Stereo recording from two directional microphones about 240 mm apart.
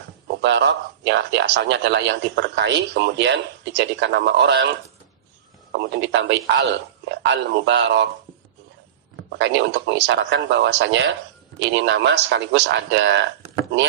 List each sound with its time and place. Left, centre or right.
0.4 s speech: right
5.7 s speech: right
9.4 s speech: right